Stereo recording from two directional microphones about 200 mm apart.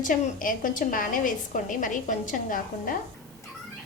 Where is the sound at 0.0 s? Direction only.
40° left (ahead or behind).